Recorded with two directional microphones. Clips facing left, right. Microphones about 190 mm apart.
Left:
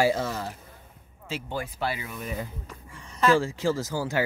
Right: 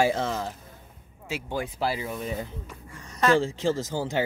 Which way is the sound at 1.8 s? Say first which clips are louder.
Right 3 dB; 30° right (ahead or behind).